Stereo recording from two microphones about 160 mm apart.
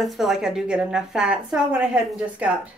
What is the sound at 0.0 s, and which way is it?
A woman's voice, centre (ahead or behind).